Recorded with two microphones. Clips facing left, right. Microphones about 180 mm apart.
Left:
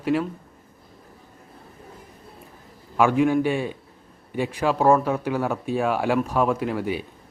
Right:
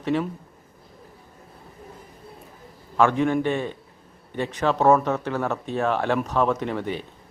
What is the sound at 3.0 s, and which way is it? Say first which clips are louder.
Speech: left 1 dB; 10° left (ahead or behind).